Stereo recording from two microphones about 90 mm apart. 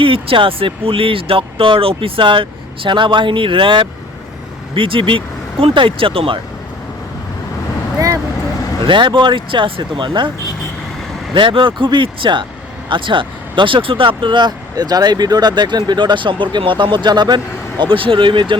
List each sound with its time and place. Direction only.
0.0 s speech: 80° right
7.9 s vehicle: 35° right (ahead or behind)
8.8 s speech: 65° right (ahead or behind)
11.3 s speech: 65° right (ahead or behind)